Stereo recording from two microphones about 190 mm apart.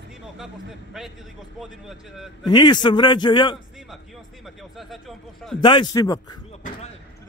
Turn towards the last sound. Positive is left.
turn(degrees=20)  # may be behind; listen again after turning